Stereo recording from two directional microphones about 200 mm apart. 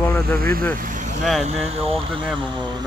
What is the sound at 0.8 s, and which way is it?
Vehicle, 40° right (ahead or behind).